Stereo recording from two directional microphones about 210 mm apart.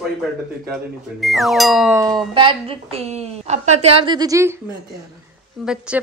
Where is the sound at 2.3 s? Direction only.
25° right (ahead or behind).